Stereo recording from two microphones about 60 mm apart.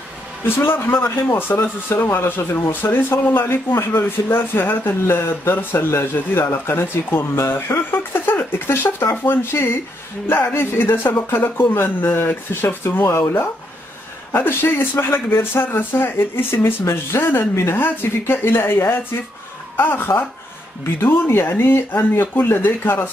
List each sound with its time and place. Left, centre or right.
0.6 s speech: left